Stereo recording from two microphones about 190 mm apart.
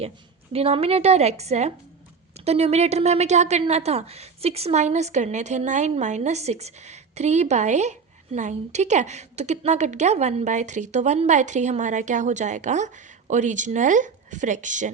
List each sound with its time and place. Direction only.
0.5 s a woman's voice: 30° right (ahead or behind)